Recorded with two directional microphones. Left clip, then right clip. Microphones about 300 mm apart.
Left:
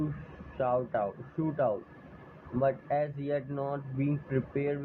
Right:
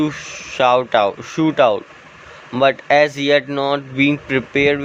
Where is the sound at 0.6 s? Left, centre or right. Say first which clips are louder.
Right 16 dB; right.